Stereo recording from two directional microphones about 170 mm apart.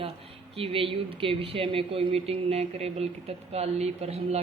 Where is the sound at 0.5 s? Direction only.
35° right (ahead or behind).